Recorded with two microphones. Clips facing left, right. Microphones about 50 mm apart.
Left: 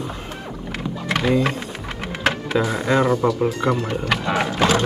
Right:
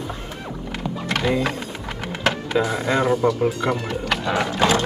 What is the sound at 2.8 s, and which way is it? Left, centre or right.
Speech, left.